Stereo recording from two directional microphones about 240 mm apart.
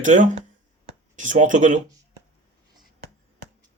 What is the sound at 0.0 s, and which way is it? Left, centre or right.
Speech, right.